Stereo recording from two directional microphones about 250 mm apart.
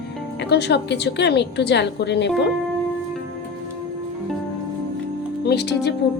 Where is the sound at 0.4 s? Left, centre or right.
Left.